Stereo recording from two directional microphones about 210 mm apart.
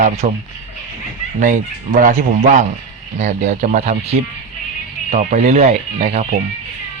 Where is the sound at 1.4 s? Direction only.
40° right (ahead or behind).